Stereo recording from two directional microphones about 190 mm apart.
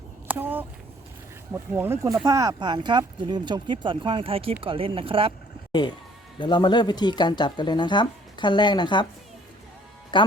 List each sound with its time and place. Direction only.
0.3 s a sound: 10° right (ahead or behind)
1.5 s speech: 10° right (ahead or behind); by 5.3 s 30° right (ahead or behind)
6.4 s speech: 25° left (ahead or behind)
10.1 s speech: 25° left (ahead or behind)